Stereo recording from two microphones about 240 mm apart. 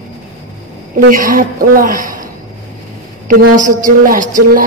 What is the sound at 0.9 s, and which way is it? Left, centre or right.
A woman's voice, right.